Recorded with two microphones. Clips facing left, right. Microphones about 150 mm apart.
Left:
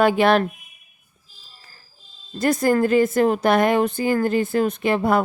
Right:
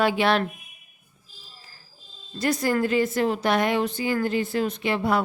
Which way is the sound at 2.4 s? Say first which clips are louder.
Left 5 dB; 50° left (ahead or behind).